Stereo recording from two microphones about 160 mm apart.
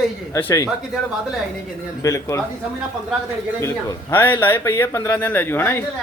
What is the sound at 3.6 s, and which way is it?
A man's voice, 15° left (ahead or behind).